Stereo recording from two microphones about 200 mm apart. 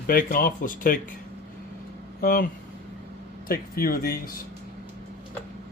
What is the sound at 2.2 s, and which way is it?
Speech, 45° left (ahead or behind).